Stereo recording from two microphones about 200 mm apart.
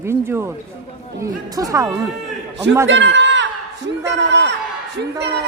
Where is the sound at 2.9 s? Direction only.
65° right (ahead or behind).